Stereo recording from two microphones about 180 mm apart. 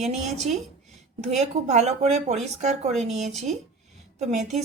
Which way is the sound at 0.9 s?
40° right (ahead or behind).